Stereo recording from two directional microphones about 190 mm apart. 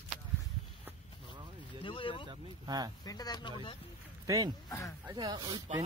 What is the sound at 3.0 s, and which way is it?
Speech, 20° left (ahead or behind).